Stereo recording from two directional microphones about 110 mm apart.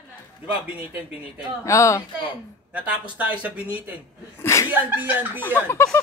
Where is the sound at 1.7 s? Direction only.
30° left (ahead or behind).